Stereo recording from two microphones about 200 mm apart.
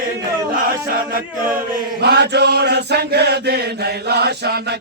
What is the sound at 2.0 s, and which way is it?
Chant, 55° right (ahead or behind).